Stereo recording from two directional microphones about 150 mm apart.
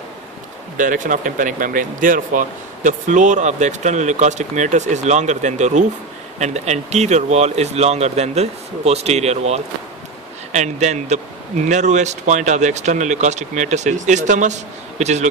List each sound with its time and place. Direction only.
0.7 s speech: 60° right (ahead or behind)